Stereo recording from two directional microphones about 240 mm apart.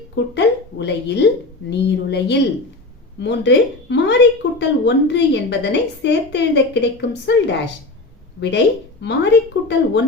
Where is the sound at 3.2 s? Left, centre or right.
Left.